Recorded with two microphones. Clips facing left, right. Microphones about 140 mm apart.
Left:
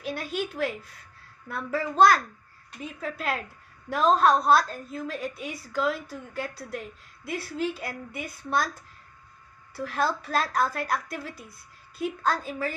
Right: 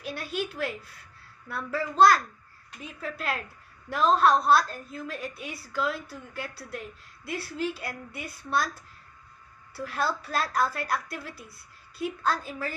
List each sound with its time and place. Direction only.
0.0 s a woman's voice: 50° left (ahead or behind)